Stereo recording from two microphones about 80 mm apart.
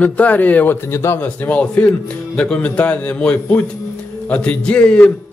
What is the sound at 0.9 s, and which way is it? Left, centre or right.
Speech, left.